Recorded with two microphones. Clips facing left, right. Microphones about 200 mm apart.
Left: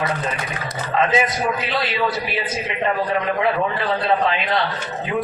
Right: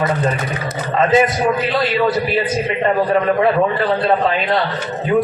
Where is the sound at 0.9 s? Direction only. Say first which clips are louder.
Right 5 dB; 50° right (ahead or behind).